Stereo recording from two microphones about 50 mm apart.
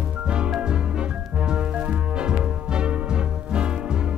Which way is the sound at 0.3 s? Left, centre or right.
Centre.